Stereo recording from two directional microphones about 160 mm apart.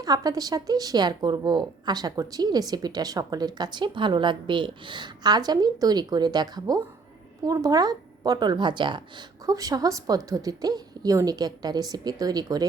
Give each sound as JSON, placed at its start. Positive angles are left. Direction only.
{"t": 0.0, "sound": "a woman's voice", "side_deg": -25}